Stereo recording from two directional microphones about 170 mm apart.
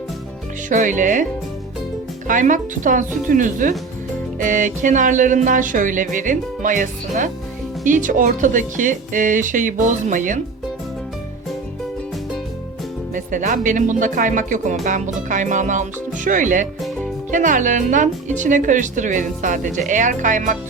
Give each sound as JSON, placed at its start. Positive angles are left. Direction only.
{"t": 0.7, "sound": "speech", "side_deg": -50}
{"t": 2.2, "sound": "speech", "side_deg": -50}
{"t": 13.1, "sound": "speech", "side_deg": -50}